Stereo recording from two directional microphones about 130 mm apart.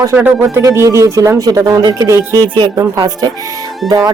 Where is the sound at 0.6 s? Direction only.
25° right (ahead or behind).